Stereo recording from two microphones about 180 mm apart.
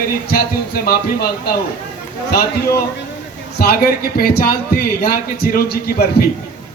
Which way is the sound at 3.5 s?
60° left (ahead or behind).